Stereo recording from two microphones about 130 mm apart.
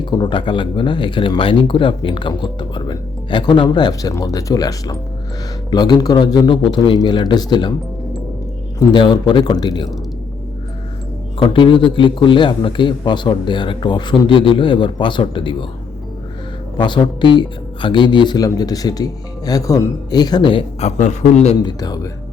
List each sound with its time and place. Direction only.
0.0 s speech: 35° left (ahead or behind)
8.8 s speech: 35° left (ahead or behind)
11.3 s speech: 40° left (ahead or behind)
16.7 s speech: 35° left (ahead or behind)
20.7 s a man's voice: 60° left (ahead or behind)
21.6 s speech: 30° left (ahead or behind)